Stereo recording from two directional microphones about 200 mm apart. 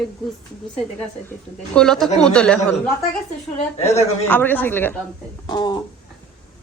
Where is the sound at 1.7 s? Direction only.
5° left (ahead or behind).